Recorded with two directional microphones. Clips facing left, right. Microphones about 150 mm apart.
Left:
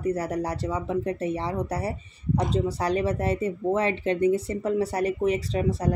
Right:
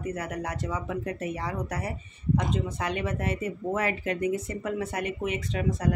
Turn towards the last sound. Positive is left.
turn(degrees=30)  # may be behind; listen again after turning